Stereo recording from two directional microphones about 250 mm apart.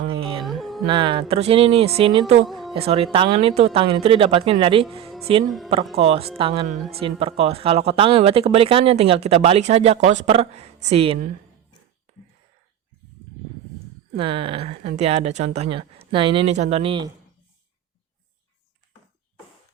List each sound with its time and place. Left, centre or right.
0.1 s music: right
0.4 s music: centre
0.9 s speech: centre
2.5 s a sound: centre
2.7 s speech: right
5.5 s speech: centre
6.0 s speech: right
14.2 s speech: right